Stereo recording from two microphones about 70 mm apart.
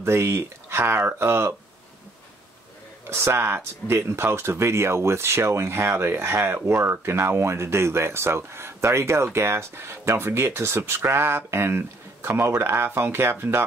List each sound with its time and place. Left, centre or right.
0.0 s speech: right
3.1 s speech: right